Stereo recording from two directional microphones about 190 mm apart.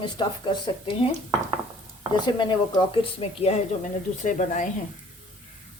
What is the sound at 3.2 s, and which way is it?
Speech, 35° left (ahead or behind).